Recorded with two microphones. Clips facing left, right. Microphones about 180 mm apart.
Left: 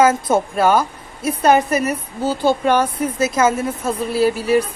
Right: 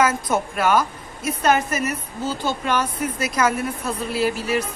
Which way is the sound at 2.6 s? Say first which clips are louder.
Left 4 dB; 55° left (ahead or behind).